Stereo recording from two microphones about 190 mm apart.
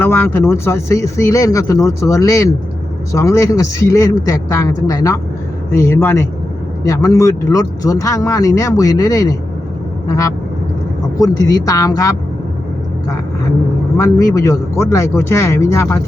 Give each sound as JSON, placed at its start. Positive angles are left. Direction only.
{"t": 0.0, "sound": "a man's voice", "side_deg": 10}
{"t": 14.0, "sound": "a man's voice", "side_deg": 15}